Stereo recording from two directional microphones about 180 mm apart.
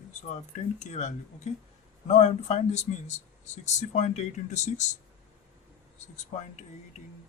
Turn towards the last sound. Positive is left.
turn(degrees=40)  # may be behind; listen again after turning